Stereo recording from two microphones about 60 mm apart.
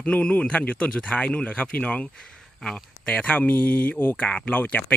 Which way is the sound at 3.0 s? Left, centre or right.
Left.